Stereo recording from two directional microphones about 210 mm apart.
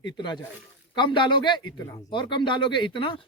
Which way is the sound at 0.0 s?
20° left (ahead or behind).